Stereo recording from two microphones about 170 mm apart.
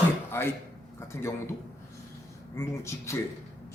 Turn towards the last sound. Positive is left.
turn(degrees=15)  # may be behind; listen again after turning